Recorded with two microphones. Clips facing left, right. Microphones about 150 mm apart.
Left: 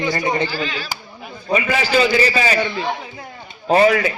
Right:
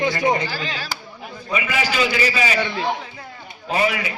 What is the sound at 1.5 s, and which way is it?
A man's voice, 35° left (ahead or behind).